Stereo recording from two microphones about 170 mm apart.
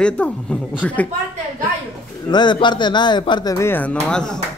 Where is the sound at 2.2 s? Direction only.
25° left (ahead or behind); by 4.4 s 5° left (ahead or behind).